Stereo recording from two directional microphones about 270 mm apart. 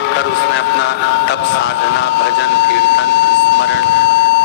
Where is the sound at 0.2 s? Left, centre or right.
Left.